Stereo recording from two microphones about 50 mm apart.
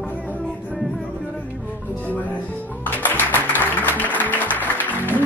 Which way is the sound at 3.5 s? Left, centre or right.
Left.